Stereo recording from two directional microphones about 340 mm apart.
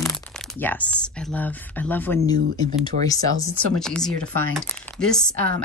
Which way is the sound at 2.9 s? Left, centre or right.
Right.